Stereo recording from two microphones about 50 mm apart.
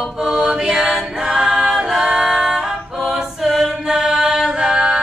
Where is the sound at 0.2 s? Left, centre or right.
Centre.